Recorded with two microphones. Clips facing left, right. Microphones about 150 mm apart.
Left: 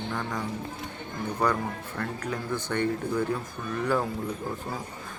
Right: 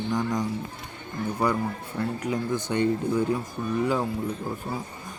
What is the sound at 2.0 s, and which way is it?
Speech, 10° right (ahead or behind).